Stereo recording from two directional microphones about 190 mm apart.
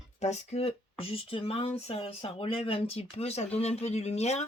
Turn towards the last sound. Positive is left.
turn(degrees=35)  # may be behind; listen again after turning